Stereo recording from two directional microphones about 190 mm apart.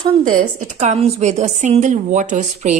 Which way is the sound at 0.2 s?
45° right (ahead or behind).